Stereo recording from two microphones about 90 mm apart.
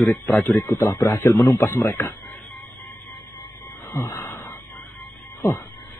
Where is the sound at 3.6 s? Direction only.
20° left (ahead or behind).